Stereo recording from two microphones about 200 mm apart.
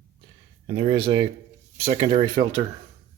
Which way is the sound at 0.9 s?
25° right (ahead or behind).